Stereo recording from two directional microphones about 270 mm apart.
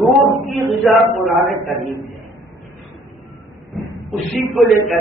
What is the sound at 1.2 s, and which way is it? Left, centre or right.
Speech, centre.